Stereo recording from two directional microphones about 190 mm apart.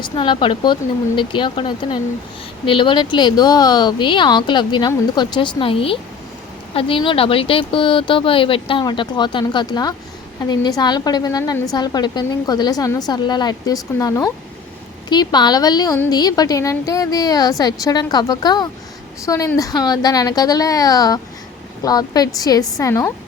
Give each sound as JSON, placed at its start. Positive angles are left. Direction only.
{"t": 0.0, "sound": "a woman's voice", "side_deg": 25}